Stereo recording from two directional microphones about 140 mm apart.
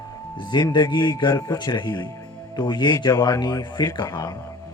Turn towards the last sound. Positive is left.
turn(degrees=30)  # may be behind; listen again after turning